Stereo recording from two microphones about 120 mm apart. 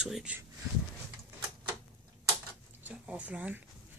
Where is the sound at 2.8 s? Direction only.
10° right (ahead or behind).